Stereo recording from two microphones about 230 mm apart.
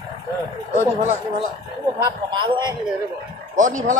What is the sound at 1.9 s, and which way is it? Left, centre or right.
Speech, right.